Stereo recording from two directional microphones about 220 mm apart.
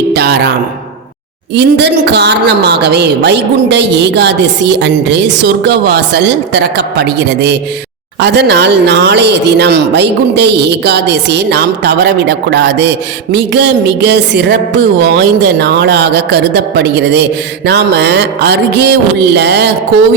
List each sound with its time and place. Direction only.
0.1 s speech: 50° right (ahead or behind)
1.5 s speech: 50° right (ahead or behind)